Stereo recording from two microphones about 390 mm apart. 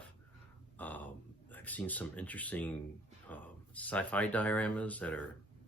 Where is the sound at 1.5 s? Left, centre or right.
Centre.